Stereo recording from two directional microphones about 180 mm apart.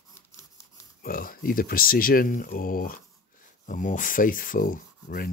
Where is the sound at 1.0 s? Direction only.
50° left (ahead or behind).